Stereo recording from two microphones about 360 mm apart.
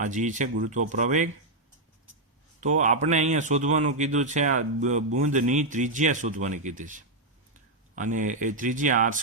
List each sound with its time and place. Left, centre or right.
0.0 s speech: right
2.6 s speech: centre